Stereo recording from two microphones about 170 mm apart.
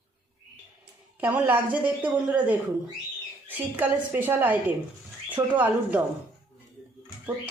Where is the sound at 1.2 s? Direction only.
10° right (ahead or behind).